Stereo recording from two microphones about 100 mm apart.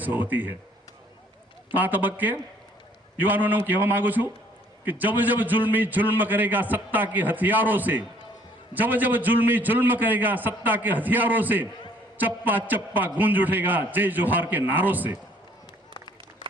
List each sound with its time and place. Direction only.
0.0 s a man's voice: 20° right (ahead or behind)
1.7 s a man's voice: 15° right (ahead or behind)